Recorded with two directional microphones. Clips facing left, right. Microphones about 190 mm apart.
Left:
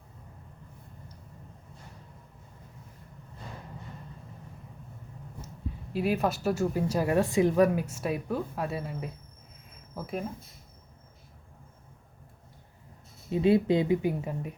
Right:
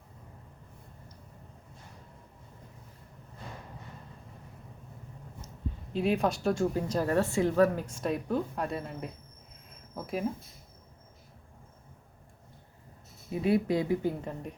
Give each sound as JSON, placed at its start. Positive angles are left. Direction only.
{"t": 5.9, "sound": "speech", "side_deg": 5}
{"t": 13.3, "sound": "speech", "side_deg": 25}